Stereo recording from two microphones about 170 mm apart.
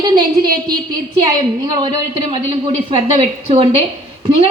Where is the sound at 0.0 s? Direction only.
25° right (ahead or behind).